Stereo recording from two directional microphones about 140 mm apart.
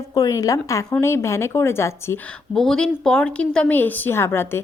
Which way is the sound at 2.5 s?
5° left (ahead or behind).